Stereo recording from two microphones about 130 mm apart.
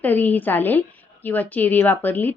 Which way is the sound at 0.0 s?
15° left (ahead or behind).